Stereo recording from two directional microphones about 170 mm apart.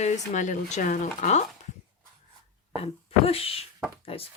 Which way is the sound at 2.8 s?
35° left (ahead or behind).